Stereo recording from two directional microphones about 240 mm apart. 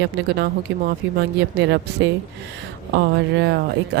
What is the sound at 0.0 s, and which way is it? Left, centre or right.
Speech, right.